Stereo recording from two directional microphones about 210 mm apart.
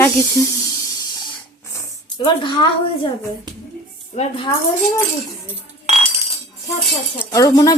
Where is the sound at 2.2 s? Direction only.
20° left (ahead or behind).